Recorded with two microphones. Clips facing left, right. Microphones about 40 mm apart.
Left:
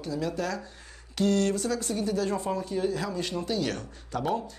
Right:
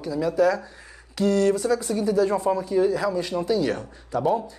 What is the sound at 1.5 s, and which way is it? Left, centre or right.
Speech, right.